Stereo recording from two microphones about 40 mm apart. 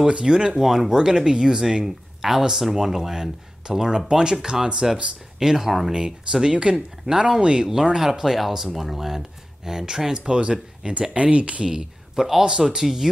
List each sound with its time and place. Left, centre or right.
0.0 s speech: centre
0.6 s speech: centre; by 11.6 s right
11.6 s speech: centre